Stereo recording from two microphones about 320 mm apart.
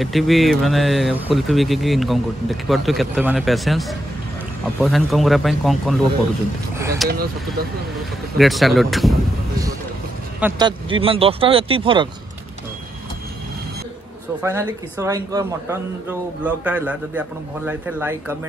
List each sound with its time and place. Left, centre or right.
0.0 s speech: centre
8.4 s speech: centre
10.4 s speech: centre
14.4 s speech: centre